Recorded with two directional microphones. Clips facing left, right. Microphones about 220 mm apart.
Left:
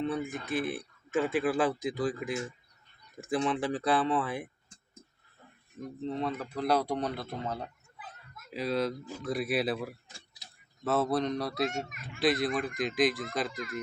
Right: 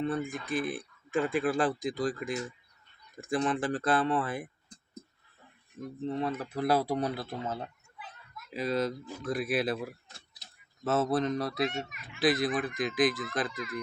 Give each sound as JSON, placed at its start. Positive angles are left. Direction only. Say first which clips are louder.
{"t": 0.0, "sound": "speech", "louder": "even", "side_deg": 0}
{"t": 6.1, "sound": "speech", "louder": "right 1 dB", "side_deg": -5}
{"t": 11.7, "sound": "speech", "louder": "left 1 dB", "side_deg": 45}
{"t": 12.2, "sound": "speech", "louder": "right 1 dB", "side_deg": 0}
{"t": 13.5, "sound": "speech", "louder": "even", "side_deg": 45}